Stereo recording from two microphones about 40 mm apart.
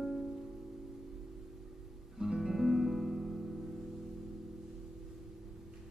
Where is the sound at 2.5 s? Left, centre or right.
Centre.